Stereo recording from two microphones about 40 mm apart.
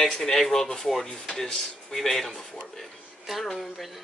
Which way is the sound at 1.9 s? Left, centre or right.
Centre.